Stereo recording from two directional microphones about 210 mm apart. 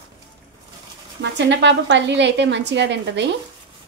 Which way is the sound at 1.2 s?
60° right (ahead or behind).